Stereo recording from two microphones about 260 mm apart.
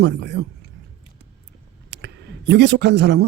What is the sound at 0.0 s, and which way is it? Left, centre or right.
Speech, right.